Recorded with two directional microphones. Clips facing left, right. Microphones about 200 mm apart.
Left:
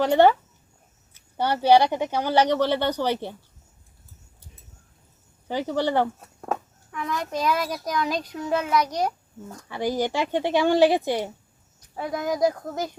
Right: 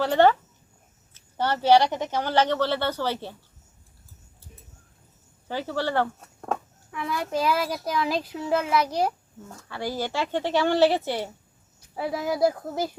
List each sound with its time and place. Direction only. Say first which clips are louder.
0.0 s speech: left 2 dB; 15° left (ahead or behind)
5.5 s speech: left 3 dB; 15° left (ahead or behind)
6.9 s a child's voice: right 1 dB; 10° right (ahead or behind)
9.6 s speech: left 5 dB; 15° left (ahead or behind)
11.9 s a child's voice: even; 5° right (ahead or behind)